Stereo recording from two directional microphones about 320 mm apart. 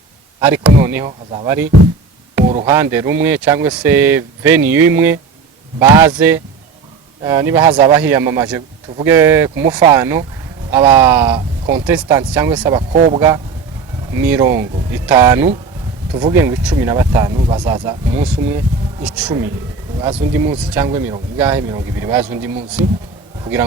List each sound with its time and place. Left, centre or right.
0.3 s a man's voice: centre
1.3 s a man's voice: centre